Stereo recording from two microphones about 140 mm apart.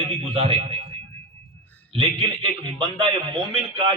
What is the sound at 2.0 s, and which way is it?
A man's voice, 35° right (ahead or behind).